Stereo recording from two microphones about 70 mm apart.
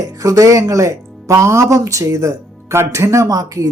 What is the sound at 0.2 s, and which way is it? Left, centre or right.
Speech, right.